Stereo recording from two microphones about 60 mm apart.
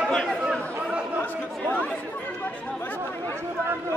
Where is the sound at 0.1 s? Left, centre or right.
Centre.